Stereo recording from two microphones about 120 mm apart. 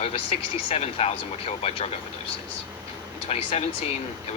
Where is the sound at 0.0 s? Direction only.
55° left (ahead or behind).